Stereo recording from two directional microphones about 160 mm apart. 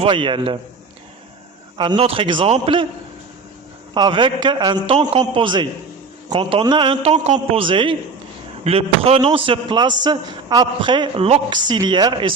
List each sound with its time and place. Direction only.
0.0 s a man's voice: 30° right (ahead or behind)
1.8 s a man's voice: 35° right (ahead or behind)
3.9 s a man's voice: 30° right (ahead or behind)